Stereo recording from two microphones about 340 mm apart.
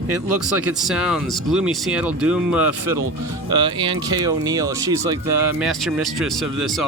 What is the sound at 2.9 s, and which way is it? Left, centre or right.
Speech, right.